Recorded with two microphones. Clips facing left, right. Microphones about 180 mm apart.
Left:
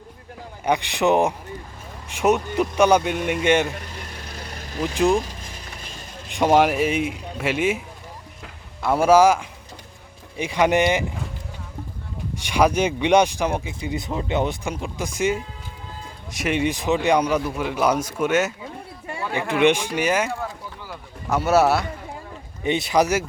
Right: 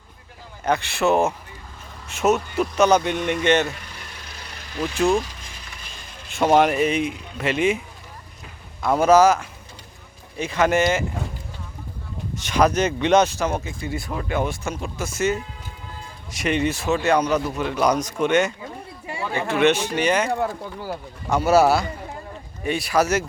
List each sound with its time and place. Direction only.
0.6 s speech: 15° left (ahead or behind)
4.8 s speech: 15° left (ahead or behind)
6.2 s speech: 15° left (ahead or behind)
8.8 s speech: 10° left (ahead or behind)
12.3 s speech: 15° left (ahead or behind)
19.0 s a sound: 5° right (ahead or behind)
19.3 s a man's voice: 15° left (ahead or behind)
22.6 s speech: 20° left (ahead or behind)